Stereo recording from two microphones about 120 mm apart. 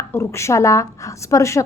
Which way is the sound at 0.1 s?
25° left (ahead or behind).